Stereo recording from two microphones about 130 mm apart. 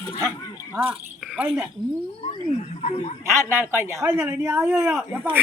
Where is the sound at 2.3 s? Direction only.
55° left (ahead or behind).